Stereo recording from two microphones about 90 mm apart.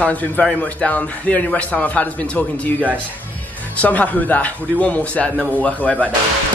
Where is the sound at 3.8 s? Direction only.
15° left (ahead or behind).